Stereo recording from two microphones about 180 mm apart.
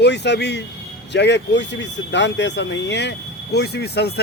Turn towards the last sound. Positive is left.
turn(degrees=65)  # may be behind; listen again after turning